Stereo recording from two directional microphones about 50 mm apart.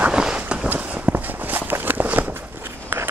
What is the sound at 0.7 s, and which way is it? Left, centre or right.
Walk, right.